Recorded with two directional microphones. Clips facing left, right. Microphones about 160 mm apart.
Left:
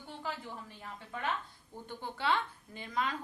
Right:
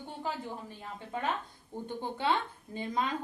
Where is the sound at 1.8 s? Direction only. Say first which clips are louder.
Right 2 dB; 20° right (ahead or behind).